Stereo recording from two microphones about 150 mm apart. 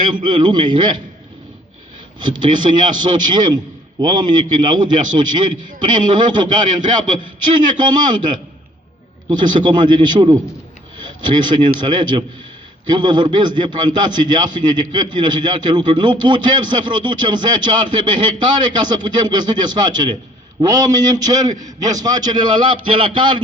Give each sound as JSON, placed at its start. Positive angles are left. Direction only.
{"t": 0.1, "sound": "a man's voice", "side_deg": -30}
{"t": 2.1, "sound": "a man's voice", "side_deg": -30}